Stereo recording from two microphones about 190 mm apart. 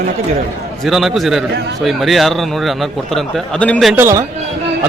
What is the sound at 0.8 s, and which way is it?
Speech, centre (ahead or behind).